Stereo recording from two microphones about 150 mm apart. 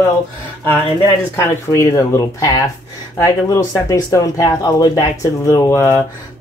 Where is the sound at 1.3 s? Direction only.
20° left (ahead or behind).